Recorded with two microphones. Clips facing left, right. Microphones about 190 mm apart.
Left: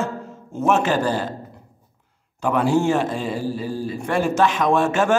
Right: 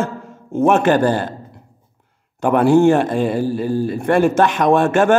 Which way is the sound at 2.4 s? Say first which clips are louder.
Right 7 dB; 55° right (ahead or behind).